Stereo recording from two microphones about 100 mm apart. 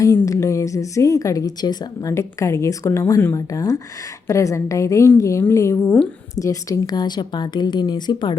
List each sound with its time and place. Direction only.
0.0 s a woman's voice: 30° left (ahead or behind)
2.1 s a woman's voice: 30° left (ahead or behind); by 8.4 s 45° left (ahead or behind)